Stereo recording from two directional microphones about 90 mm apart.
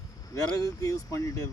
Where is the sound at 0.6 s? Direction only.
40° left (ahead or behind).